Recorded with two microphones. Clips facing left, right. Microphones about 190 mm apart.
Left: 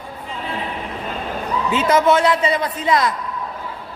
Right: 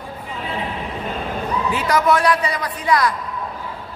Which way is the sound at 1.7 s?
25° left (ahead or behind).